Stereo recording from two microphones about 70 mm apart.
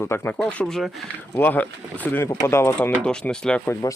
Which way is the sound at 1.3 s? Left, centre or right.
Left.